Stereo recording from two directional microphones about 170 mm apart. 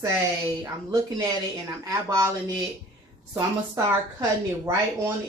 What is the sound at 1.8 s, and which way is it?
Speech, 20° right (ahead or behind).